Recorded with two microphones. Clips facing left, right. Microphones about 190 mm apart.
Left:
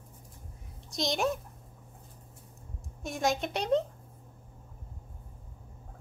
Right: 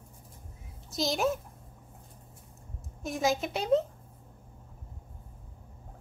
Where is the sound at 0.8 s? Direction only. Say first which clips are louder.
Right 1 dB; centre (ahead or behind).